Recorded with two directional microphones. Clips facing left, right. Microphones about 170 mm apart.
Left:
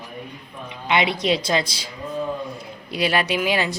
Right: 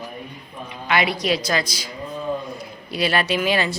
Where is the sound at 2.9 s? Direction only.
15° left (ahead or behind).